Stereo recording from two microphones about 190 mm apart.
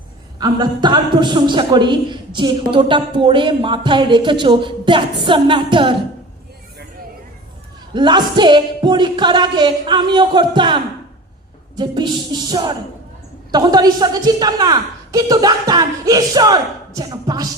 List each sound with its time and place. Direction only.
0.3 s a woman's voice: 20° right (ahead or behind)
7.9 s a woman's voice: 25° right (ahead or behind)